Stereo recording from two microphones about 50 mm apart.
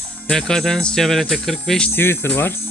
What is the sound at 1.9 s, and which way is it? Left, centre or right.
Speech, left.